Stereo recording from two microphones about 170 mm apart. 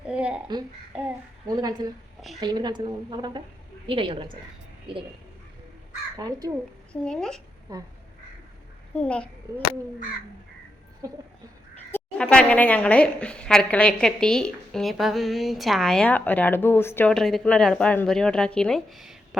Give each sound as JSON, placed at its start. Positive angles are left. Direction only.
{"t": 0.0, "sound": "a sound", "side_deg": -5}
{"t": 1.5, "sound": "speech", "side_deg": -25}
{"t": 6.1, "sound": "speech", "side_deg": -20}
{"t": 6.9, "sound": "a woman's voice", "side_deg": 5}
{"t": 7.7, "sound": "speech", "side_deg": -20}
{"t": 9.0, "sound": "a child's voice", "side_deg": 5}
{"t": 11.9, "sound": "a sound", "side_deg": 10}
{"t": 12.2, "sound": "a woman's voice", "side_deg": 5}